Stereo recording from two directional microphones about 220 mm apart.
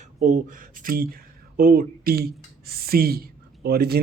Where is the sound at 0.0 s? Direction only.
35° right (ahead or behind).